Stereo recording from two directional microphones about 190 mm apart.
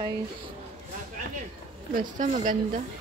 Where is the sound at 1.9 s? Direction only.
45° right (ahead or behind).